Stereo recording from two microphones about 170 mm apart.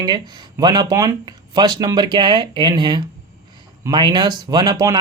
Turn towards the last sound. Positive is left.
turn(degrees=-20)  # may be behind; listen again after turning